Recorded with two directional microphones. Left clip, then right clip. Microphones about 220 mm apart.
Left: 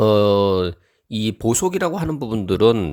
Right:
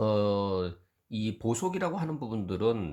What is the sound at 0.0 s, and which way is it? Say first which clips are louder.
Speech: left 13 dB; 45° left (ahead or behind).